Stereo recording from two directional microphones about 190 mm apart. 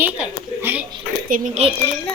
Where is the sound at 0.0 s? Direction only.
10° right (ahead or behind).